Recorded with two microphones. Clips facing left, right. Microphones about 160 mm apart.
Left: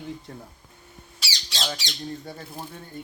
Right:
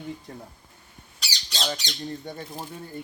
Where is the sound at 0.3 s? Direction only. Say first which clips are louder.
Even; centre (ahead or behind).